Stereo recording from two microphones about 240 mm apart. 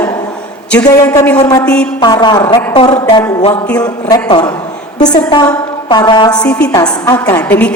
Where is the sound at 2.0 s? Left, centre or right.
Centre.